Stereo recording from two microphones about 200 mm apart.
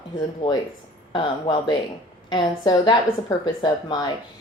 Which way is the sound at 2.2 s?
20° left (ahead or behind).